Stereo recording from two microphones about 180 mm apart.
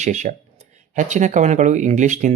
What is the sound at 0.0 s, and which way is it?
Speech, 40° right (ahead or behind).